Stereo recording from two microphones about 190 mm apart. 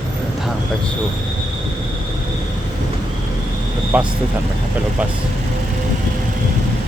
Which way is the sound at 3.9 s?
5° right (ahead or behind).